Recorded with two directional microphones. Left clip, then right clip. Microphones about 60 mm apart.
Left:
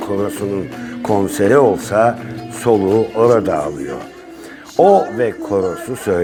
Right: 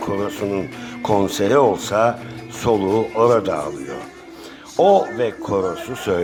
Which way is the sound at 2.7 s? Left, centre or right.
Centre.